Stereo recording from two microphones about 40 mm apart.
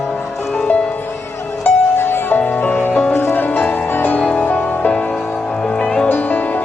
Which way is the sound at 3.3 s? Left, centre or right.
Left.